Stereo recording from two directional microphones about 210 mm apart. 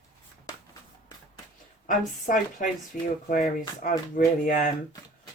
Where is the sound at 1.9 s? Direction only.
40° left (ahead or behind).